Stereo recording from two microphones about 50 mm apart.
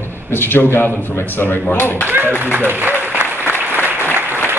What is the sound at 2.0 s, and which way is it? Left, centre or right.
Speech, right.